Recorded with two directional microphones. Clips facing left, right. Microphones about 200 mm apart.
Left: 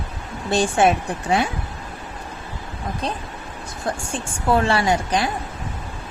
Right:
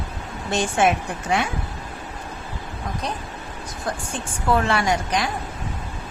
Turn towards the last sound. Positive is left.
turn(degrees=30)  # may be behind; listen again after turning